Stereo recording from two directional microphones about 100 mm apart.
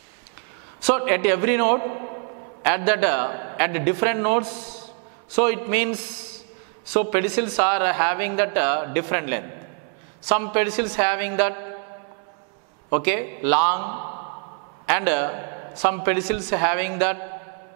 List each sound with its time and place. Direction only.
0.8 s speech: 10° right (ahead or behind)
12.9 s speech: 10° right (ahead or behind)